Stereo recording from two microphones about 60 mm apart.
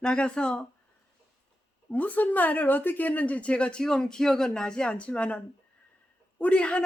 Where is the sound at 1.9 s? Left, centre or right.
Left.